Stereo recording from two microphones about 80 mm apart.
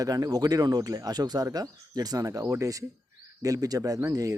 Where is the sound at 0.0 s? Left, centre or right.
Right.